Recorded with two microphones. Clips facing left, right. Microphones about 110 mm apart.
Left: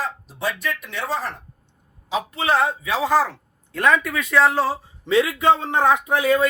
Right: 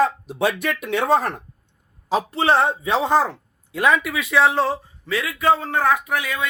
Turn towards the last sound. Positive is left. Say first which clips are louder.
# left 6 dB
turn(degrees=35)  # may be behind; listen again after turning